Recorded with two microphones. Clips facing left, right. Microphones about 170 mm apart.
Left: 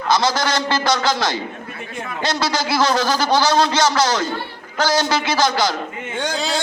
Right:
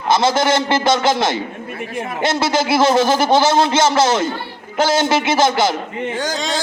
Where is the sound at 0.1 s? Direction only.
25° right (ahead or behind).